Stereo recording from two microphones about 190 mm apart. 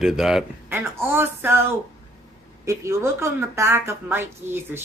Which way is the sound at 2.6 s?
15° right (ahead or behind).